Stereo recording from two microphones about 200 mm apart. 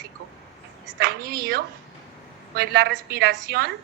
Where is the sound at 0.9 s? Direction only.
50° right (ahead or behind).